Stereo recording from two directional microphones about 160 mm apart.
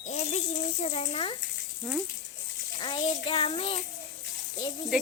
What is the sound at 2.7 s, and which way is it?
Child singing, 30° left (ahead or behind).